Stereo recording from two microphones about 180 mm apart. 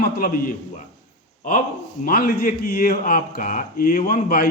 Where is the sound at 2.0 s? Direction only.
50° left (ahead or behind).